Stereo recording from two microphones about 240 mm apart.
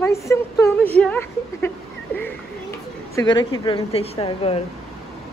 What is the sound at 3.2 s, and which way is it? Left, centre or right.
A woman's voice, centre.